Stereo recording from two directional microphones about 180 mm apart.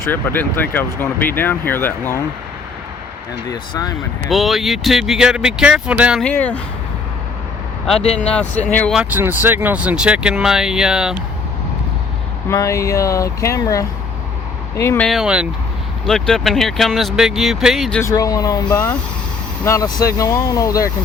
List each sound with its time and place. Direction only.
0.1 s speech: 10° left (ahead or behind)
3.5 s speech: 20° left (ahead or behind)
4.3 s speech: centre (ahead or behind)
6.2 s speech: 10° left (ahead or behind)
8.2 s speech: 5° left (ahead or behind)
9.0 s speech: 10° right (ahead or behind)
12.5 s speech: 15° left (ahead or behind)
15.0 s speech: centre (ahead or behind)
18.0 s speech: 20° left (ahead or behind)